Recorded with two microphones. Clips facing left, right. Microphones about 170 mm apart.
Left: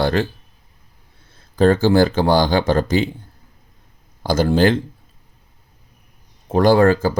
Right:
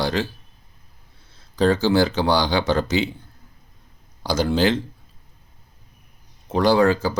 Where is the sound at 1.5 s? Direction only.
50° left (ahead or behind).